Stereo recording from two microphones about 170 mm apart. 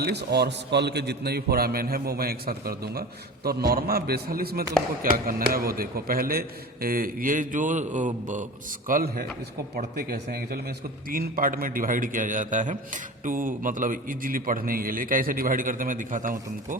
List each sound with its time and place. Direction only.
0.0 s a man's voice: 75° right (ahead or behind); by 8.4 s 45° right (ahead or behind)
8.9 s a man's voice: 60° right (ahead or behind)